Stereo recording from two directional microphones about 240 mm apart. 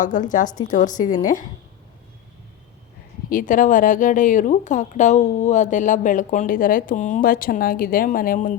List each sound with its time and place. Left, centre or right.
0.0 s speech: left
3.2 s speech: left